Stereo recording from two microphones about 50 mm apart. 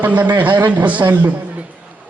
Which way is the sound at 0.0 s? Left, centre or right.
Right.